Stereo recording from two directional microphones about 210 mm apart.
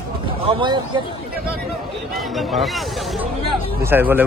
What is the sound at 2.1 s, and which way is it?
A man's voice, centre (ahead or behind).